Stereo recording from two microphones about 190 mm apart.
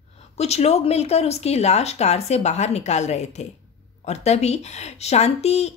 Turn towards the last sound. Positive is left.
turn(degrees=35)  # may be behind; listen again after turning